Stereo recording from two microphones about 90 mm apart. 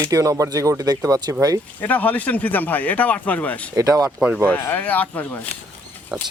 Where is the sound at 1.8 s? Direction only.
20° left (ahead or behind).